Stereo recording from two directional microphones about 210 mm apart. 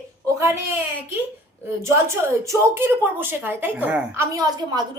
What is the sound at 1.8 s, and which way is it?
A woman's voice, 15° right (ahead or behind).